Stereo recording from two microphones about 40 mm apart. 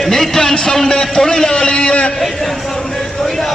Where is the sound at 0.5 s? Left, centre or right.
Centre.